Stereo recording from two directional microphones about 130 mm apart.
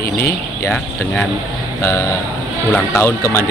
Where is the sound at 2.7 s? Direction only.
20° left (ahead or behind).